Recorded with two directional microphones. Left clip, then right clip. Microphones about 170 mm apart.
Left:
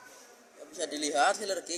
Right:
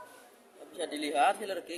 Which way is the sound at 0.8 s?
20° left (ahead or behind).